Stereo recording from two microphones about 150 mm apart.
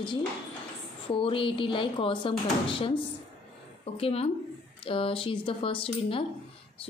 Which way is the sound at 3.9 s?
40° left (ahead or behind).